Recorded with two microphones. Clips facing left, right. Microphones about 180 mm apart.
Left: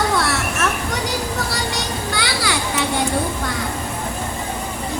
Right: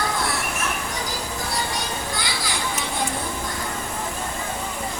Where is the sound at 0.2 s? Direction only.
75° left (ahead or behind).